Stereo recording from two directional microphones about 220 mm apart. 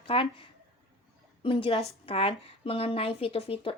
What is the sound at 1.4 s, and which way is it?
Speech, 25° left (ahead or behind).